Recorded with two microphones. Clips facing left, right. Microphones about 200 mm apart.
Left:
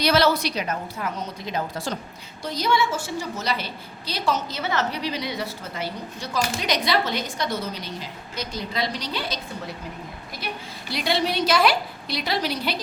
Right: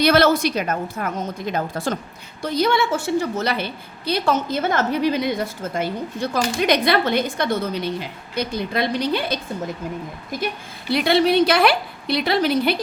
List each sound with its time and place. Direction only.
0.0 s a woman's voice: 55° right (ahead or behind)
10.9 s a woman's voice: 60° right (ahead or behind)